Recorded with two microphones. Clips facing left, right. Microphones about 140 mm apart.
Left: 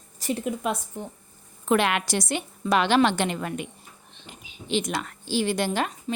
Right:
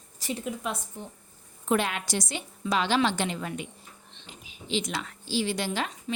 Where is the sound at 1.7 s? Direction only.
75° left (ahead or behind); by 3.6 s 60° left (ahead or behind).